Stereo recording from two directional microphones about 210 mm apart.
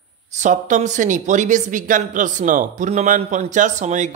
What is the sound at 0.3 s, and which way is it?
Speech, 35° right (ahead or behind).